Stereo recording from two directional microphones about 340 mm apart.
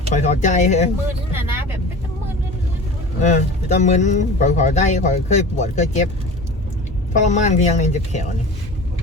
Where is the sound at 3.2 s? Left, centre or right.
Left.